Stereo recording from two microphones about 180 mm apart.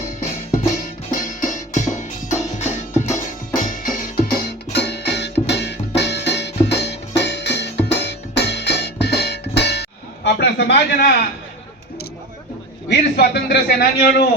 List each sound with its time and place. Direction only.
1.1 s music: 50° left (ahead or behind); by 9.8 s 70° left (ahead or behind)
10.2 s a sound: 70° left (ahead or behind)
12.9 s a man's voice: 65° left (ahead or behind)